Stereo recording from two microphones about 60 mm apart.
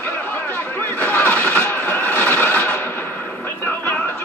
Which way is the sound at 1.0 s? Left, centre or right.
Left.